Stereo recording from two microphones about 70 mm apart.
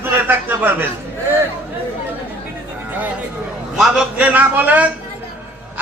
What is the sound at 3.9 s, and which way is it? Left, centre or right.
A man's voice, centre.